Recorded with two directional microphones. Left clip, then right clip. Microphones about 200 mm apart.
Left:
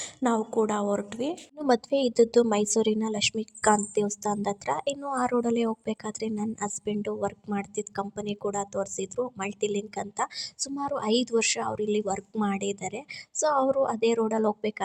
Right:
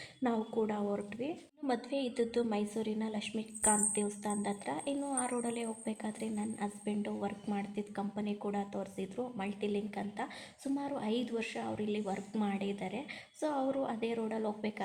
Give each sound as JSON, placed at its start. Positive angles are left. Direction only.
{"t": 0.2, "sound": "a woman's voice", "side_deg": 25}
{"t": 1.6, "sound": "a woman's voice", "side_deg": 50}